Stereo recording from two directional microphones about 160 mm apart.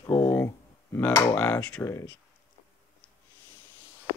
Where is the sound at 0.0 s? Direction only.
20° left (ahead or behind).